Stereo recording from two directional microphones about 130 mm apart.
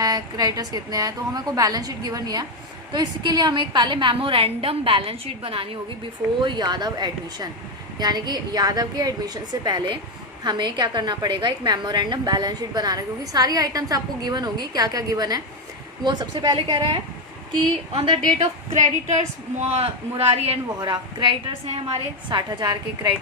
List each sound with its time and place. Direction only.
0.0 s a woman's voice: 30° right (ahead or behind)
18.8 s a woman's voice: 65° right (ahead or behind)
19.7 s a man's voice: 50° right (ahead or behind)
20.7 s a woman's voice: 35° right (ahead or behind)